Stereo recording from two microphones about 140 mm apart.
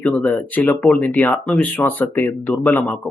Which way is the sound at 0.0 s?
10° left (ahead or behind).